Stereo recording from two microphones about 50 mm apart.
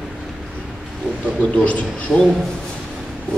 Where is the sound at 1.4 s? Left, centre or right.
Left.